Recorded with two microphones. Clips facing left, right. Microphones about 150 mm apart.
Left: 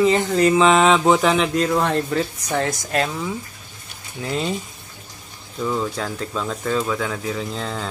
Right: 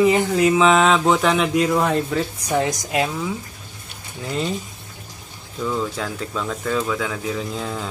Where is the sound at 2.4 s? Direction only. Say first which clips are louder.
Right 2 dB; 15° right (ahead or behind).